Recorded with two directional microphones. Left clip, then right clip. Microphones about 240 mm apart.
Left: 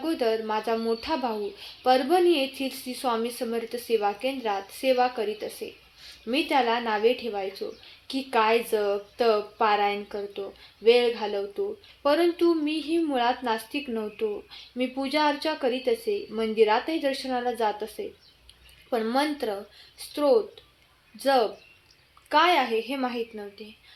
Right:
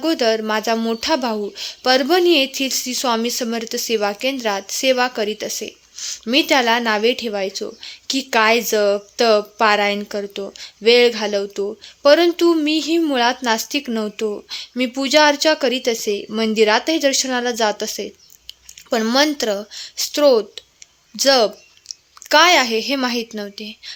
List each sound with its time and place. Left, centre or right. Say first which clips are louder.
0.0 s speech: right 8 dB; right